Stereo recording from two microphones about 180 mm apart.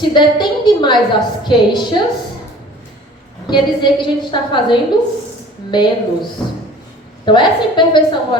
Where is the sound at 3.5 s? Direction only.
25° left (ahead or behind).